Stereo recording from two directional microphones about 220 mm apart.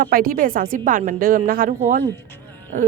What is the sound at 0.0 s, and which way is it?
Speech, 40° right (ahead or behind).